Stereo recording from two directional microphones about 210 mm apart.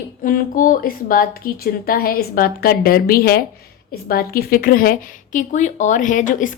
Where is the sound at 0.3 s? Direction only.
40° left (ahead or behind).